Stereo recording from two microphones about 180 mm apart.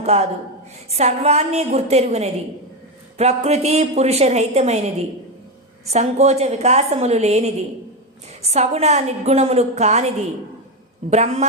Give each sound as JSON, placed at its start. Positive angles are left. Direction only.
{"t": 0.0, "sound": "a woman's voice", "side_deg": -35}
{"t": 11.1, "sound": "a woman's voice", "side_deg": -40}